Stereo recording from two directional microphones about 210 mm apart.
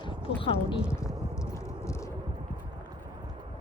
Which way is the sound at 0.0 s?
25° left (ahead or behind).